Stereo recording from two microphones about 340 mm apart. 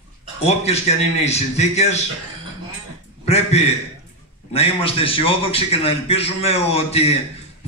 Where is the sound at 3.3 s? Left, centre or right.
Centre.